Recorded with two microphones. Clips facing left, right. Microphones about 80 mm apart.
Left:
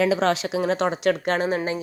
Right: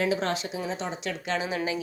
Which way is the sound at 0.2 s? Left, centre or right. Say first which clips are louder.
Left 8 dB; left.